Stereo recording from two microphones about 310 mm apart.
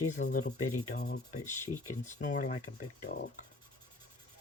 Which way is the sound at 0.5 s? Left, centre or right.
Left.